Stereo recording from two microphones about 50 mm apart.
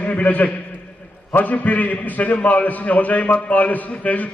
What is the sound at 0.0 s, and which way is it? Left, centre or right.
A man's voice, left.